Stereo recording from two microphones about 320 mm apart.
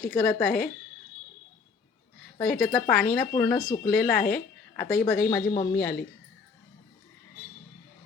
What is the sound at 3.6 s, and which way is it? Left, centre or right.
Speech, left.